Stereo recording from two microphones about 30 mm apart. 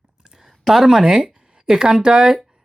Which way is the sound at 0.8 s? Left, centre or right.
Centre.